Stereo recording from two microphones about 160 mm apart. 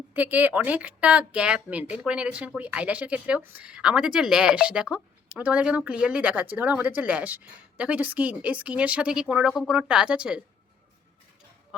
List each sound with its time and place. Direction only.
0.1 s speech: 10° right (ahead or behind)
11.7 s speech: 5° right (ahead or behind)